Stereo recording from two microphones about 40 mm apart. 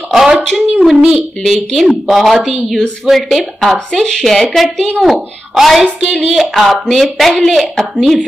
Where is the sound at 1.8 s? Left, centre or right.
Centre.